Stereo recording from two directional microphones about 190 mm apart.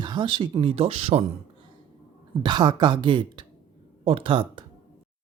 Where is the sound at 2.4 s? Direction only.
25° right (ahead or behind).